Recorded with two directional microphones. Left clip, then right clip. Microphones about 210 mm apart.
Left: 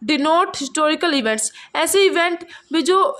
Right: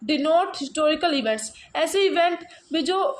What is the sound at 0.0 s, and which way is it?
A woman's voice, 30° left (ahead or behind).